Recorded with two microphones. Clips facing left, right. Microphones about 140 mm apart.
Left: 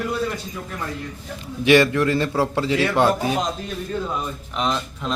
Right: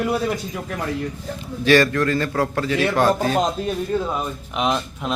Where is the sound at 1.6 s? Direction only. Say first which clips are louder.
Left 1 dB; 20° left (ahead or behind).